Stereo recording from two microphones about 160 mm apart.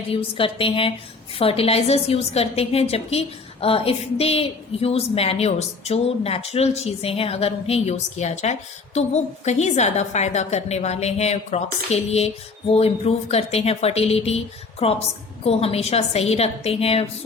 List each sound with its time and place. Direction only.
0.1 s a woman's voice: 35° left (ahead or behind)